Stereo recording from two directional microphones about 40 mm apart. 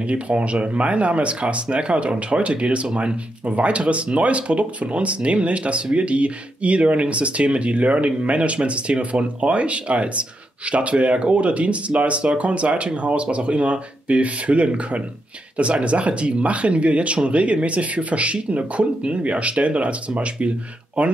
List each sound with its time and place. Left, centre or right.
0.1 s speech: right